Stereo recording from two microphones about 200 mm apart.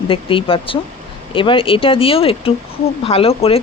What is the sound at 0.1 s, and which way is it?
Speech, 25° left (ahead or behind).